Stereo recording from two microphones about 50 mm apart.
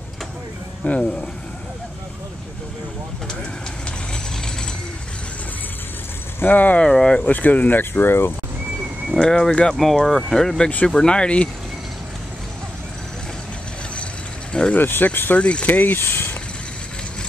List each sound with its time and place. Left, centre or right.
0.8 s speech: left
6.4 s speech: left
6.8 s speech: centre
7.2 s speech: left
9.2 s speech: centre
9.8 s speech: centre; by 11.4 s left
14.5 s speech: left
14.8 s speech: left
15.3 s speech: left